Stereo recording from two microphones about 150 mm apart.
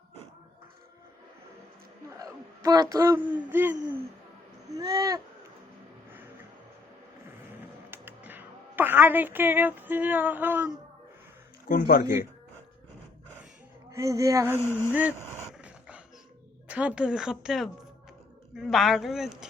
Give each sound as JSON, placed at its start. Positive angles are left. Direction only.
{"t": 2.0, "sound": "a sound", "side_deg": -20}
{"t": 2.6, "sound": "speech", "side_deg": -25}
{"t": 3.2, "sound": "a sound", "side_deg": -10}
{"t": 4.8, "sound": "speech", "side_deg": -25}
{"t": 7.9, "sound": "music", "side_deg": -15}
{"t": 11.7, "sound": "speech", "side_deg": 80}
{"t": 13.9, "sound": "speech", "side_deg": -20}
{"t": 15.5, "sound": "dog", "side_deg": -10}
{"t": 16.6, "sound": "speech", "side_deg": -10}